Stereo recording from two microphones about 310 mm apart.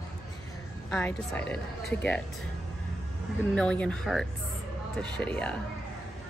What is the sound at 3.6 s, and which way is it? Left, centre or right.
A woman's voice, centre.